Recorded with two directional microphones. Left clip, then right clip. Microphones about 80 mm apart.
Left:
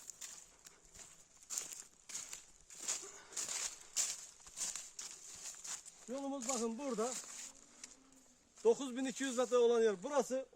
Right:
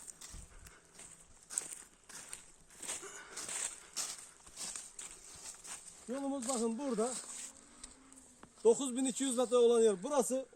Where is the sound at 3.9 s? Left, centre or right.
Left.